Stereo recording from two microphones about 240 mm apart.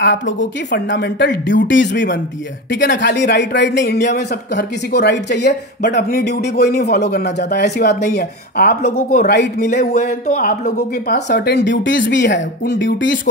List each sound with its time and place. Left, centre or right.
0.0 s speech: left